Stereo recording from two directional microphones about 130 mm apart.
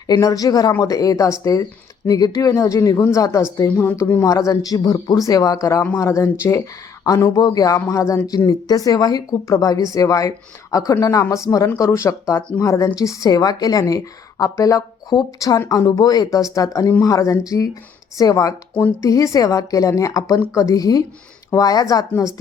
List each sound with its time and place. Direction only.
0.1 s speech: 30° left (ahead or behind)
18.7 s speech: 15° left (ahead or behind)
19.0 s speech: 25° left (ahead or behind)